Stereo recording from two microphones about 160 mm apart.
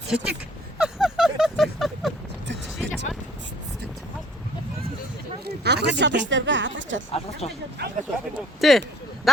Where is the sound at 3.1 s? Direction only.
Centre (ahead or behind).